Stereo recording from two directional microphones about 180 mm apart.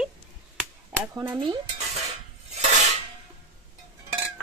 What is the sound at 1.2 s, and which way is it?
Speech, 20° right (ahead or behind).